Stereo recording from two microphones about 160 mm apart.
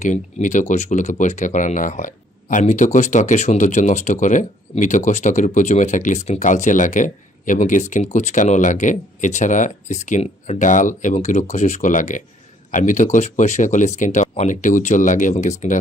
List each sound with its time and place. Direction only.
0.0 s speech: 50° left (ahead or behind)